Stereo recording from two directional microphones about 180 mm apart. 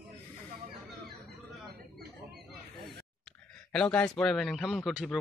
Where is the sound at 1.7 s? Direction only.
60° right (ahead or behind).